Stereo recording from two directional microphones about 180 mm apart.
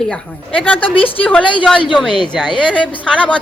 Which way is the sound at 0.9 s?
30° left (ahead or behind).